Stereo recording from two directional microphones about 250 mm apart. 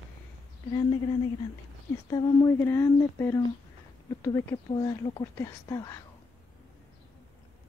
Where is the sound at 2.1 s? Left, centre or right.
Centre.